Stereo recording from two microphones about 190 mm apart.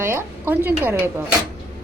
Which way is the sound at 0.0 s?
10° right (ahead or behind).